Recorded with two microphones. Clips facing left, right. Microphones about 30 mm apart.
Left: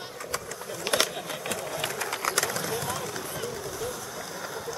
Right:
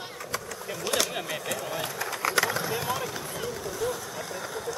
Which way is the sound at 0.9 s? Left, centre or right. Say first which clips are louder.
Left 2 dB; left.